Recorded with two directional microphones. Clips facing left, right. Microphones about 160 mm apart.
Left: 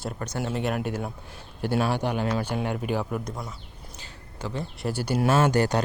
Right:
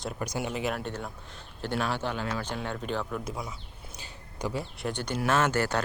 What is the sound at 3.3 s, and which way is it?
Speech, centre (ahead or behind).